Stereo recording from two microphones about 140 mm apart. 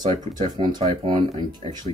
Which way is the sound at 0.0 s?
30° right (ahead or behind).